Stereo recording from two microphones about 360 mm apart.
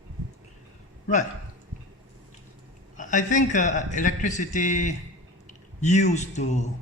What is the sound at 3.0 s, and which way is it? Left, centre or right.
A man's voice, left.